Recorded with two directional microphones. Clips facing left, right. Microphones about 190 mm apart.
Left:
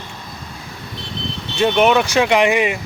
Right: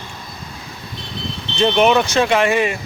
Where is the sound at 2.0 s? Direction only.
15° left (ahead or behind).